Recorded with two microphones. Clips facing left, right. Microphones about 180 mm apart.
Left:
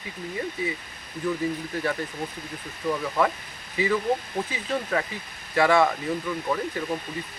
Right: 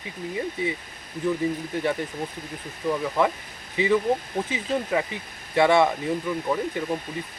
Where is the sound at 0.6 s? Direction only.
25° right (ahead or behind).